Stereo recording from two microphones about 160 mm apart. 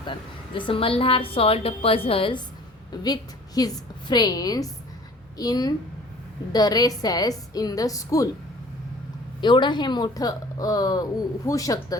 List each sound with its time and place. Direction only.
0.0 s a woman's voice: 30° left (ahead or behind)
9.4 s a woman's voice: 30° left (ahead or behind)